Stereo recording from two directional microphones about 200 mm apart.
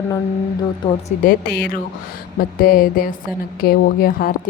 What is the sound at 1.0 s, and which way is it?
A woman's voice, 45° left (ahead or behind).